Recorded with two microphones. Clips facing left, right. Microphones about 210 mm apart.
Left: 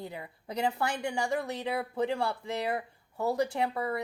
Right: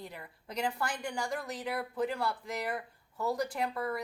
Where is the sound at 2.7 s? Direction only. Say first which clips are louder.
Left 4 dB; 60° left (ahead or behind).